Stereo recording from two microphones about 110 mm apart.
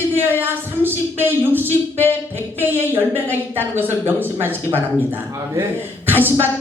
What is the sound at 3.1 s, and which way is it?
A man's voice, 20° right (ahead or behind).